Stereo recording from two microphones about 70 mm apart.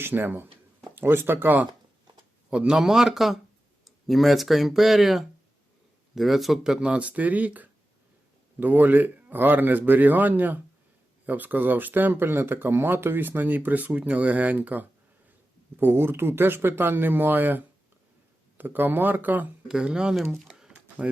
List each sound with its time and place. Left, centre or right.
0.0 s speech: right
2.5 s speech: centre
19.6 s speech: centre
20.5 s a sound: centre